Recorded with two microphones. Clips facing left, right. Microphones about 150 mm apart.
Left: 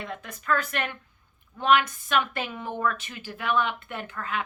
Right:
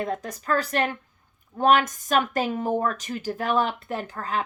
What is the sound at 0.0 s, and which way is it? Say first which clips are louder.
A woman's voice: right 7 dB; 40° right (ahead or behind).